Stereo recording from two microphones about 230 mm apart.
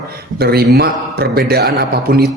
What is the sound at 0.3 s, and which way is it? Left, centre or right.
A man's voice, right.